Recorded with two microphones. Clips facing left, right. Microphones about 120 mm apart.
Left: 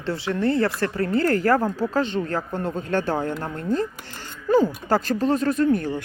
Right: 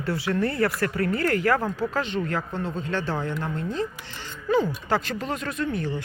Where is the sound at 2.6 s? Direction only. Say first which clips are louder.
Left 4 dB; 50° left (ahead or behind).